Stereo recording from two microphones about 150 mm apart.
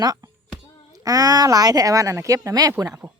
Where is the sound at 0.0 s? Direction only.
25° right (ahead or behind).